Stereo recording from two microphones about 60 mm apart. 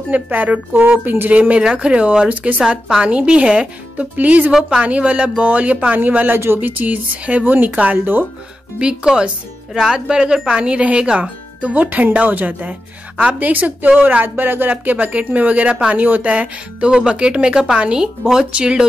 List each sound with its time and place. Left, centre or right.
0.1 s speech: right
6.8 s speech: right
8.7 s speech: centre